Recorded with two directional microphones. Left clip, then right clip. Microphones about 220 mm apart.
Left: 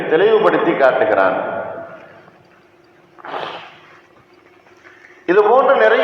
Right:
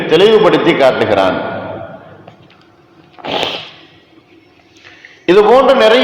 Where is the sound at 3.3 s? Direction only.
45° right (ahead or behind).